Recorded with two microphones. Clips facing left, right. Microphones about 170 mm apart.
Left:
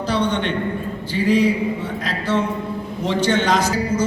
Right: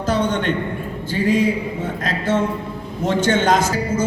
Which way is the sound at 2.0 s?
50° right (ahead or behind).